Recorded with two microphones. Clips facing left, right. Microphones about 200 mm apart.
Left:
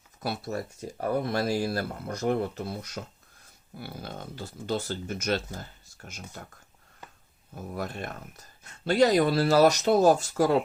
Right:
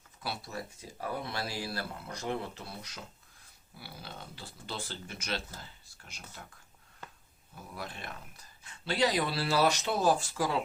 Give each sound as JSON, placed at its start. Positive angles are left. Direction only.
{"t": 0.2, "sound": "speech", "side_deg": 45}
{"t": 7.5, "sound": "speech", "side_deg": 45}